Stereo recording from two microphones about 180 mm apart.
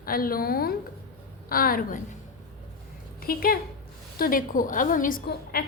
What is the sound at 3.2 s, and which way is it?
A woman's voice, 55° left (ahead or behind).